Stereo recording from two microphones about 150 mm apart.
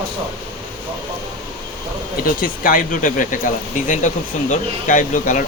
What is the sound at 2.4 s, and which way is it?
Speech, 70° left (ahead or behind).